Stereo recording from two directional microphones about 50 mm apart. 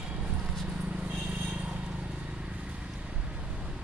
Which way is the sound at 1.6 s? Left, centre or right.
Right.